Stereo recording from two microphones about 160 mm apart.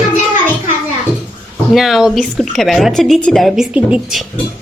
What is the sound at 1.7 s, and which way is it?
Speech, centre (ahead or behind).